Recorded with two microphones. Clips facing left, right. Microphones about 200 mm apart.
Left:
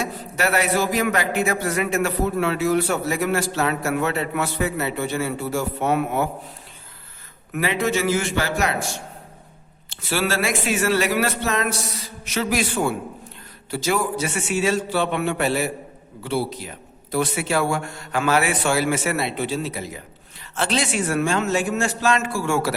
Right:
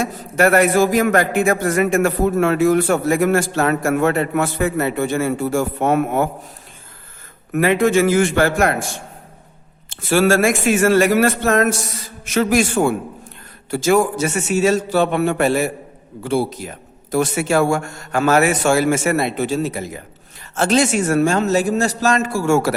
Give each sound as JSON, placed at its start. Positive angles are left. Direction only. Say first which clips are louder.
{"t": 0.0, "sound": "a man's voice", "louder": "right 7 dB", "side_deg": -50}
{"t": 7.5, "sound": "a man's voice", "louder": "right 7 dB", "side_deg": -50}
{"t": 9.9, "sound": "a man's voice", "louder": "right 9 dB", "side_deg": -50}